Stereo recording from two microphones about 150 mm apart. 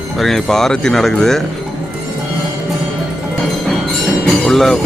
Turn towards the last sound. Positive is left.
turn(degrees=0)  # may be behind; listen again after turning